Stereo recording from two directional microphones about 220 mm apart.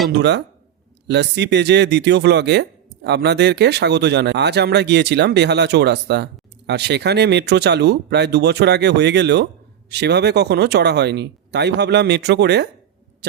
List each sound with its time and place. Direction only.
0.1 s speech: 50° right (ahead or behind)